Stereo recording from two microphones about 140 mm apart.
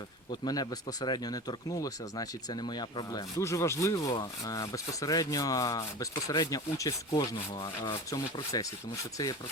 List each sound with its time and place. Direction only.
0.3 s speech: 30° left (ahead or behind)
7.2 s rub: 35° left (ahead or behind)
8.5 s speech: 30° left (ahead or behind)